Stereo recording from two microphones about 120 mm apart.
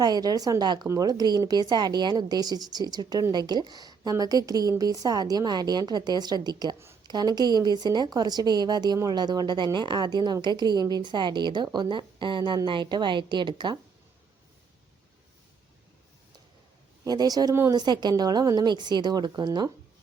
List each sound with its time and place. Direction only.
0.0 s a woman's voice: 30° right (ahead or behind)
17.0 s a woman's voice: 35° right (ahead or behind)